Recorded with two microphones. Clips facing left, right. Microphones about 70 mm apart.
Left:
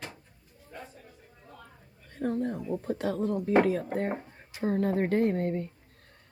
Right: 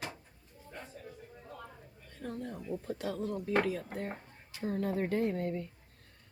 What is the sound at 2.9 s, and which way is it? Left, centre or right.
Speech, left.